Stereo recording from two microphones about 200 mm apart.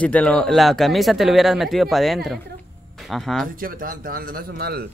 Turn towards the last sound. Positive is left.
turn(degrees=-50)  # may be behind; listen again after turning